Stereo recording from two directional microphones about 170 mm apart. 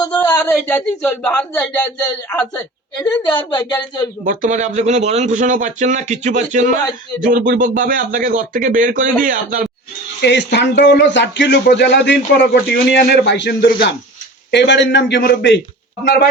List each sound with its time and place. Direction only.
0.0 s a sound: 25° left (ahead or behind)
0.5 s speech: 5° left (ahead or behind)
3.0 s a woman's voice: 30° left (ahead or behind)
4.2 s a man's voice: 50° right (ahead or behind)
10.2 s a man's voice: 90° left